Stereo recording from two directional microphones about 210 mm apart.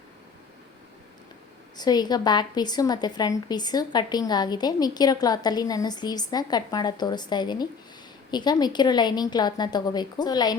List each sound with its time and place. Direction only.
1.7 s a woman's voice: 20° left (ahead or behind)